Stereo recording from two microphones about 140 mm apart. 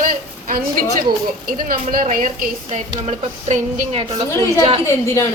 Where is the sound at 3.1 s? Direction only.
55° right (ahead or behind).